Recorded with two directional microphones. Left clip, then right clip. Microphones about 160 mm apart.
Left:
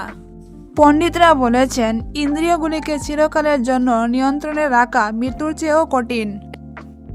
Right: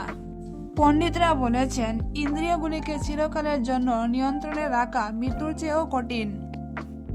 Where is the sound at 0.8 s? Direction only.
50° left (ahead or behind).